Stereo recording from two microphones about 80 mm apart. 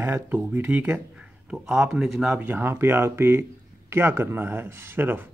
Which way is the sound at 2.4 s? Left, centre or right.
Right.